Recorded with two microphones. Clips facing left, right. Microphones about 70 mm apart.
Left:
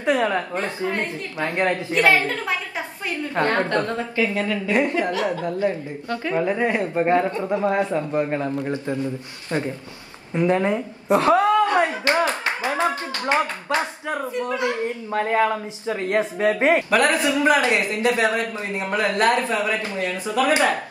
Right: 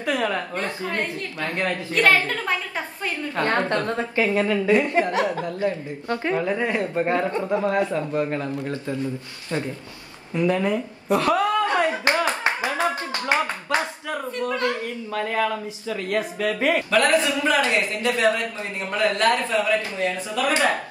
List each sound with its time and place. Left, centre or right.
0.0 s speech: left
3.8 s a woman's voice: right
5.4 s speech: left
10.3 s a woman's voice: left
12.1 s clapping: left
14.1 s speech: centre